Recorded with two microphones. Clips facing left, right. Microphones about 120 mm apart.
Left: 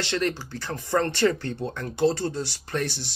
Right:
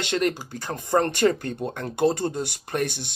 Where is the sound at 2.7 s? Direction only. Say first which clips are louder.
Right 2 dB; 50° right (ahead or behind).